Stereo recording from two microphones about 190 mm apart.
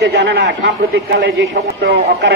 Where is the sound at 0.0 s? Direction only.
60° right (ahead or behind).